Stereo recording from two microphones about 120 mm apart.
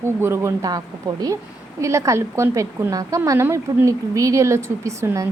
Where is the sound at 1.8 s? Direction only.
25° right (ahead or behind).